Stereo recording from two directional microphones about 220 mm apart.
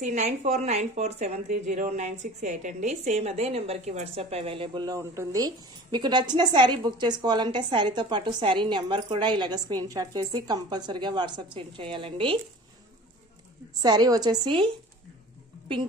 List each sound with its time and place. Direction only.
0.0 s speech: 30° right (ahead or behind)
13.7 s speech: 20° right (ahead or behind)